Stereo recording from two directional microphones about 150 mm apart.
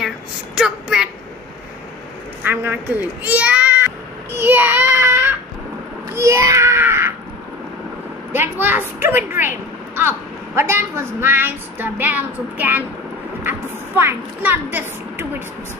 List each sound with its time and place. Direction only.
0.6 s a woman's voice: 5° right (ahead or behind)
2.4 s a woman's voice: 15° right (ahead or behind)
8.3 s a woman's voice: 15° right (ahead or behind)